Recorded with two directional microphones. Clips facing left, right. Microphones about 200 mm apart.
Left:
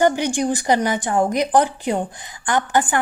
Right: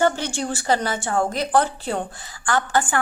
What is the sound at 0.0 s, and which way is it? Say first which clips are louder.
A woman's voice: left 4 dB; 15° left (ahead or behind).